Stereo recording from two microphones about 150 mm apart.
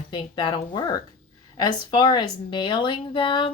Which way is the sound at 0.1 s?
30° left (ahead or behind).